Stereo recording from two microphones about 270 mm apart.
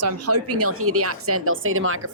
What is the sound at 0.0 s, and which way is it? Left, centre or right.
Speech, right.